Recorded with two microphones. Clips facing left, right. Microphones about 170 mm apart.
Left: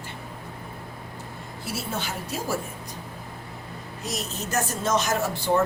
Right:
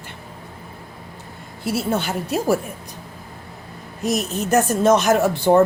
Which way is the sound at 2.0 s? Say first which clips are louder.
Right 9 dB; 65° right (ahead or behind).